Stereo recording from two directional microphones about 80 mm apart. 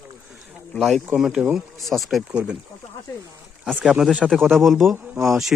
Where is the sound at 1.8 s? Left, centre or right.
Centre.